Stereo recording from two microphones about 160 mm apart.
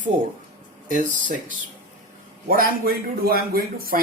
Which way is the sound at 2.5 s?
65° right (ahead or behind).